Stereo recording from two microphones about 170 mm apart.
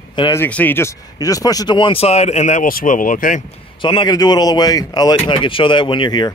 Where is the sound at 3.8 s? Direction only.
30° left (ahead or behind).